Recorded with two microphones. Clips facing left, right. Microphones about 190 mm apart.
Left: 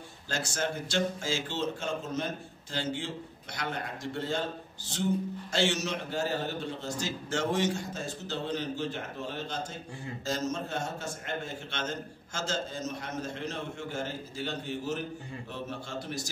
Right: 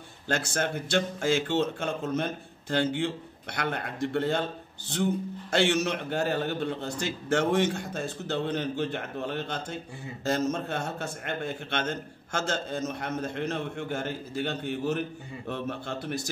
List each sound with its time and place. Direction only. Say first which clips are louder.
0.3 s a man's voice: right 4 dB; 60° right (ahead or behind)
5.5 s a man's voice: right 5 dB; 60° right (ahead or behind)